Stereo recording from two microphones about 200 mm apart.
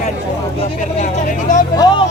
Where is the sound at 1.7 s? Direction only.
20° left (ahead or behind).